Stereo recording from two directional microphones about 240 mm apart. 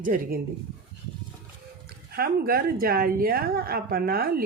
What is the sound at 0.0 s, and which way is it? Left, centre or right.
Speech, right.